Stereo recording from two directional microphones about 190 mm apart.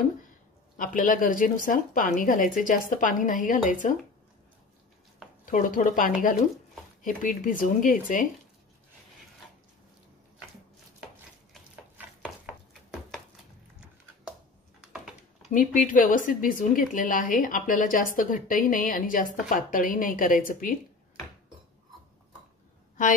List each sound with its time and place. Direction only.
0.7 s a woman's voice: 45° left (ahead or behind)
5.4 s a woman's voice: 45° left (ahead or behind)
14.8 s a sound: centre (ahead or behind)
15.5 s a woman's voice: 45° left (ahead or behind)